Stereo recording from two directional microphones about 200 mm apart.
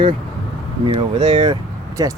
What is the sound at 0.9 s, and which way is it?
Speech, 30° right (ahead or behind).